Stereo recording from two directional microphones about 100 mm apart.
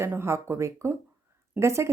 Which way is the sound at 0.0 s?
25° right (ahead or behind).